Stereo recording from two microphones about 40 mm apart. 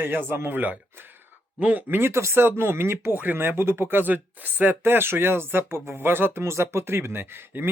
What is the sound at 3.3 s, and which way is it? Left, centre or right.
Speech, right.